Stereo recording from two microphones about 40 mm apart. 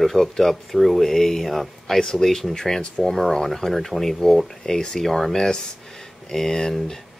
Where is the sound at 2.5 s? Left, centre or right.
Centre.